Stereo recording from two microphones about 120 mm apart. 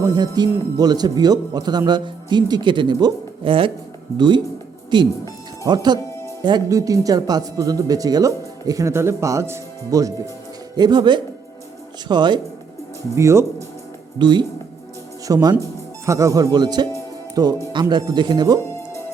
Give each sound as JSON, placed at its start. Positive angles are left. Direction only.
{"t": 0.0, "sound": "speech", "side_deg": -35}
{"t": 4.9, "sound": "speech", "side_deg": -40}
{"t": 10.8, "sound": "speech", "side_deg": -40}
{"t": 13.1, "sound": "speech", "side_deg": -25}
{"t": 14.2, "sound": "speech", "side_deg": -40}